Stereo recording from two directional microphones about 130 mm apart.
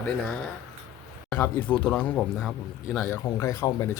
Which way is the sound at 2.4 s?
5° right (ahead or behind).